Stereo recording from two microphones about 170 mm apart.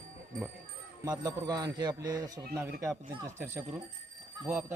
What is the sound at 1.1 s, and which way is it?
Speech, 20° right (ahead or behind).